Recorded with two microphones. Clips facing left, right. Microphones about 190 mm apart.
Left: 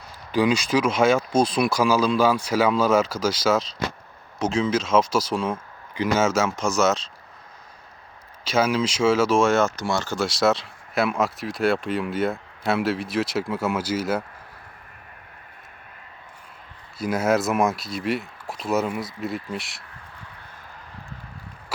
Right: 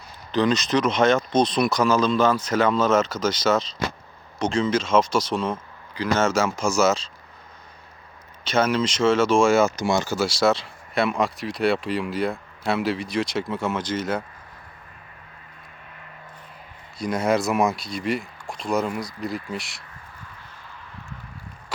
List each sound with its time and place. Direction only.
0.3 s speech: 10° left (ahead or behind)
8.4 s speech: 5° left (ahead or behind)
9.8 s speech: 15° right (ahead or behind)
10.2 s speech: centre (ahead or behind)
17.0 s speech: 5° left (ahead or behind)